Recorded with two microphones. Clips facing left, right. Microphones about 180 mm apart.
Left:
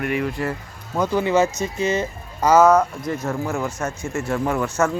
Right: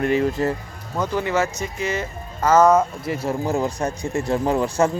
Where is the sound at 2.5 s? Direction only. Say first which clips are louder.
Left 1 dB; 5° left (ahead or behind).